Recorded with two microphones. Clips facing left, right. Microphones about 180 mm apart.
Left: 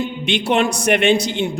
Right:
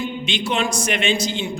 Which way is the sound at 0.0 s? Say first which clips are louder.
Left 4 dB; 65° left (ahead or behind).